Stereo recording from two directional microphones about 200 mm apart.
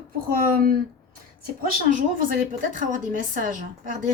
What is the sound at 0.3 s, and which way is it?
Speech, 45° right (ahead or behind).